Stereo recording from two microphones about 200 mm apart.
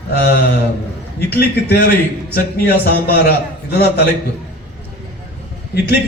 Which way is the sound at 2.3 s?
50° left (ahead or behind).